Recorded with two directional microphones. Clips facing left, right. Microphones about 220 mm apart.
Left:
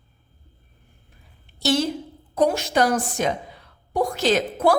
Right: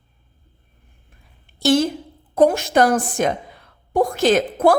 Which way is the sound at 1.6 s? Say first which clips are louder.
Right 5 dB; 50° right (ahead or behind).